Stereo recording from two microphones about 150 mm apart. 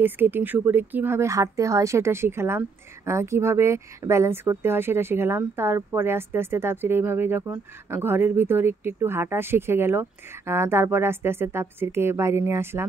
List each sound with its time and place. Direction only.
0.0 s speech: 15° right (ahead or behind)